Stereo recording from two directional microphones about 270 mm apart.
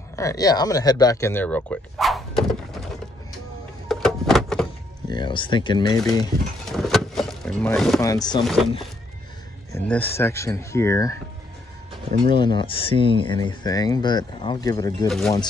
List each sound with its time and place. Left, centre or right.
0.1 s speech: centre
3.9 s a sound: centre
5.1 s speech: centre
6.7 s vehicle: centre
8.0 s speech: centre
9.7 s speech: centre
12.3 s speech: centre
15.0 s speech: centre